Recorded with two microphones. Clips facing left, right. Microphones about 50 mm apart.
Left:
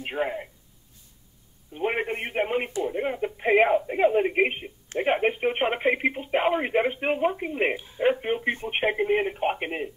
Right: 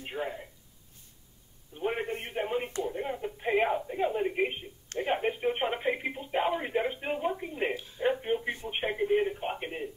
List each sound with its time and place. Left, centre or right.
0.0 s speech: left
1.8 s radio: left
2.8 s speech: left
7.7 s speech: left
8.0 s speech: left